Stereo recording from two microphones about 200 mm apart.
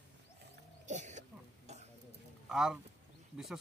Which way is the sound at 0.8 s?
35° right (ahead or behind).